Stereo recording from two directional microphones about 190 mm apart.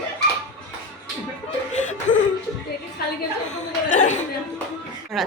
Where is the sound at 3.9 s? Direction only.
40° left (ahead or behind).